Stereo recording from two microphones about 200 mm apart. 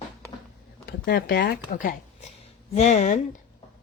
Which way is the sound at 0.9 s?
50° left (ahead or behind).